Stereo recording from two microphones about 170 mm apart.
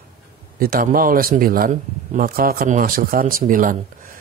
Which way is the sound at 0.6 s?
60° right (ahead or behind).